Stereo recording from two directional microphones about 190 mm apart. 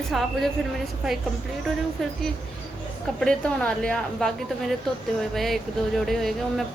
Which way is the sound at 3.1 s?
5° left (ahead or behind).